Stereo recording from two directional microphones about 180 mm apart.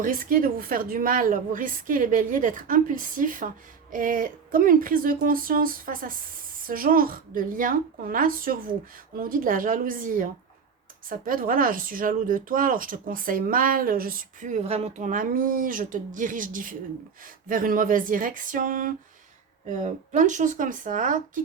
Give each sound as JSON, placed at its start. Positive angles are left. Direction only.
{"t": 0.0, "sound": "speech", "side_deg": -50}